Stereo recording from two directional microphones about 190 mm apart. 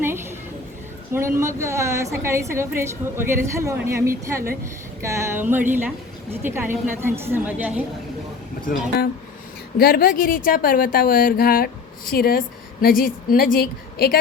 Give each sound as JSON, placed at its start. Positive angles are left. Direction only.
{"t": 0.0, "sound": "a sound", "side_deg": -10}
{"t": 1.1, "sound": "a woman's voice", "side_deg": -15}
{"t": 8.6, "sound": "speech", "side_deg": 45}